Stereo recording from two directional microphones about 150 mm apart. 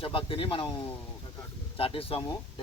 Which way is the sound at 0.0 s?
35° left (ahead or behind).